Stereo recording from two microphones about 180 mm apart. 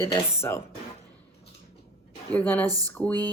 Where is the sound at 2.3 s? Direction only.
10° left (ahead or behind).